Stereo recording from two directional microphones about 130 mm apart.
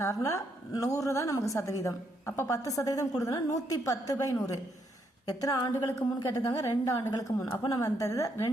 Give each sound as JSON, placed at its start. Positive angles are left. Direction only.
{"t": 0.0, "sound": "a woman's voice", "side_deg": 20}